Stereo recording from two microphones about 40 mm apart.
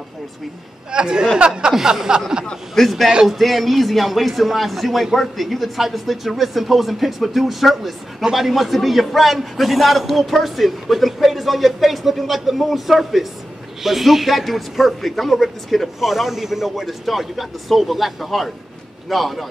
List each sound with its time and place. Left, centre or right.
0.9 s speech: right
2.7 s a man's voice: centre